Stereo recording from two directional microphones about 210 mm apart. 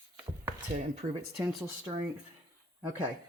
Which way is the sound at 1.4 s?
Centre (ahead or behind).